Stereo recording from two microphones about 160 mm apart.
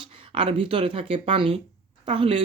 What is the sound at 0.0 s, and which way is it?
Speech, 35° right (ahead or behind).